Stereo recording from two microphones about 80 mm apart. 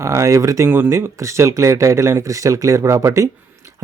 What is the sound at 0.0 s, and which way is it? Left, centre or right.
Speech, right.